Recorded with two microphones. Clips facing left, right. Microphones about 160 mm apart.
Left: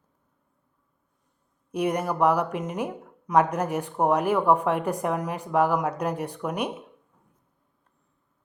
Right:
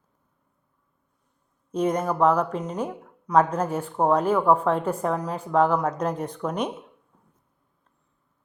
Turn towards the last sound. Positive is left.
turn(degrees=10)  # may be behind; listen again after turning